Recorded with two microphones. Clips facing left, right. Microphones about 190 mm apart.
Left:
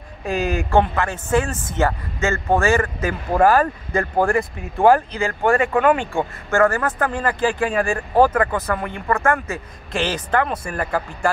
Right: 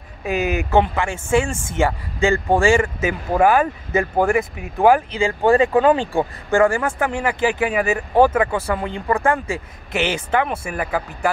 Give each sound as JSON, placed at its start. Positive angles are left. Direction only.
{"t": 0.3, "sound": "speech", "side_deg": -15}
{"t": 0.6, "sound": "speech", "side_deg": -5}